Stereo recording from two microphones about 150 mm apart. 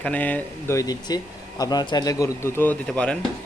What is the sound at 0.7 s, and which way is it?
Speech, 25° left (ahead or behind).